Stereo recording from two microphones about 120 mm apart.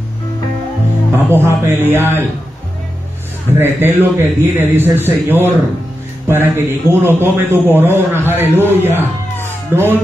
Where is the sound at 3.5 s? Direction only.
20° right (ahead or behind).